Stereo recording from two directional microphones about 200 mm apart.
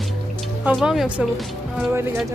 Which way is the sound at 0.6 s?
5° right (ahead or behind).